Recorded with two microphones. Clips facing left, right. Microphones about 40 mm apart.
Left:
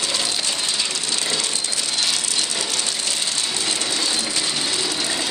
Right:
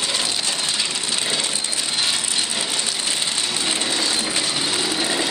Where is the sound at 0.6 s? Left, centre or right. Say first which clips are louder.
Even; centre.